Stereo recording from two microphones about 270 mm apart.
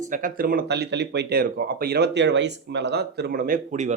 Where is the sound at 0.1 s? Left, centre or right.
Right.